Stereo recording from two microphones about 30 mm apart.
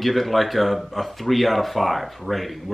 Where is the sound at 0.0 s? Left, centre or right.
Centre.